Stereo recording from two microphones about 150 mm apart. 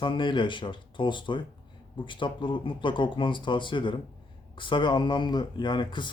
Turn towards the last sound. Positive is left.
turn(degrees=30)  # may be behind; listen again after turning